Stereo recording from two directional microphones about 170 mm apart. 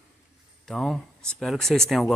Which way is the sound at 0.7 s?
Centre (ahead or behind).